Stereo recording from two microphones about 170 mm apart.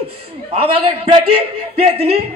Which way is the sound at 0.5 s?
35° right (ahead or behind).